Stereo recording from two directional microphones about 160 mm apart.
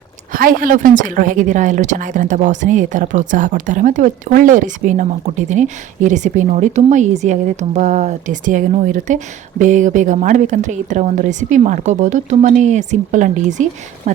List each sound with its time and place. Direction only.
0.3 s a woman's voice: 60° right (ahead or behind)